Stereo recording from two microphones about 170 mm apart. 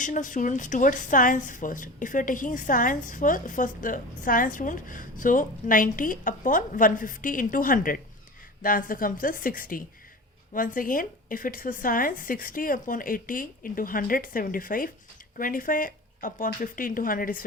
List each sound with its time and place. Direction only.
0.0 s a woman's voice: 50° left (ahead or behind)